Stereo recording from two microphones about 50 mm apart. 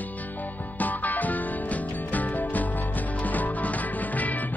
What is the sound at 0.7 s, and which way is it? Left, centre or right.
Music, left.